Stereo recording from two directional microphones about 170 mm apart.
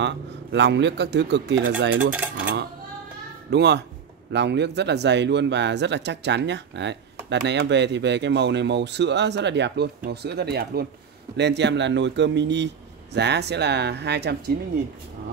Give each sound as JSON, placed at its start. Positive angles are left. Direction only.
{"t": 0.0, "sound": "speech", "side_deg": -90}
{"t": 3.4, "sound": "speech", "side_deg": -80}
{"t": 11.3, "sound": "speech", "side_deg": -90}